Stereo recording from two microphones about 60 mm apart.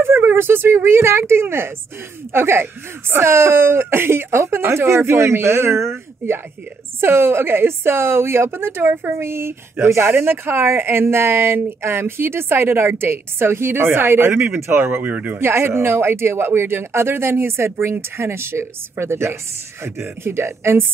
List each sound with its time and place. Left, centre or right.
0.0 s a woman's voice: right
15.3 s a woman's voice: right